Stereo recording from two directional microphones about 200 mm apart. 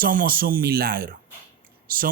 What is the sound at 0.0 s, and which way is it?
Speech, 45° right (ahead or behind).